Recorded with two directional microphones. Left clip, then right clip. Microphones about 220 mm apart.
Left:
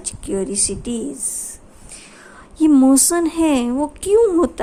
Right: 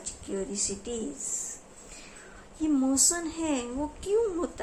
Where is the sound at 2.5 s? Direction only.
50° left (ahead or behind).